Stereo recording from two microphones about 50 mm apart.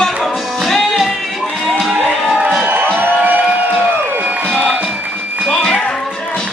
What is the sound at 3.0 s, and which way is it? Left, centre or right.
Music, right.